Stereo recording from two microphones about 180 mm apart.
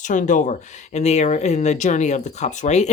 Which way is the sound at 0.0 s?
45° left (ahead or behind).